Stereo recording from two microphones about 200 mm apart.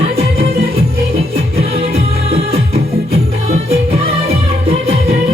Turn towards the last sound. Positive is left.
turn(degrees=-30)  # may be behind; listen again after turning